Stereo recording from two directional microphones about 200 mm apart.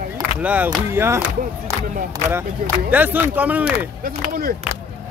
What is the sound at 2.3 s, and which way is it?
Speech, 10° right (ahead or behind).